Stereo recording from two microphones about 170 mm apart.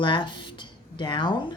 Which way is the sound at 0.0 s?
30° left (ahead or behind).